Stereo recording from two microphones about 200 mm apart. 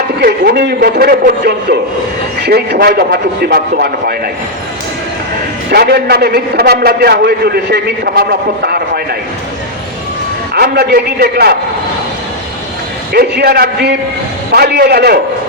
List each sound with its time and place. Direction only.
0.2 s a man's voice: 50° right (ahead or behind)
5.7 s a man's voice: 50° right (ahead or behind)
10.5 s a man's voice: 50° right (ahead or behind)
13.1 s a man's voice: 50° right (ahead or behind)